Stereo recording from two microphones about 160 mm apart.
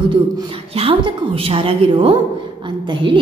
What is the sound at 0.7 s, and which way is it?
A woman's voice, 35° right (ahead or behind).